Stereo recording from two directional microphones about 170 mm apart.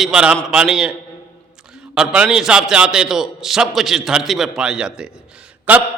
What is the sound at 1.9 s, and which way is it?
A man's voice, 5° right (ahead or behind).